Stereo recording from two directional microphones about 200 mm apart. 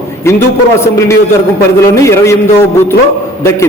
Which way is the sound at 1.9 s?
15° left (ahead or behind).